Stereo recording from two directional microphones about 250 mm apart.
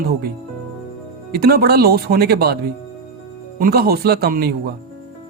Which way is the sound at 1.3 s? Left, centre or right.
Right.